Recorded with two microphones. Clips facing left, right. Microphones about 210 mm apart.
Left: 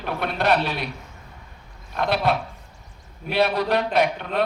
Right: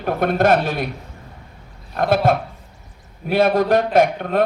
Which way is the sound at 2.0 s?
45° right (ahead or behind).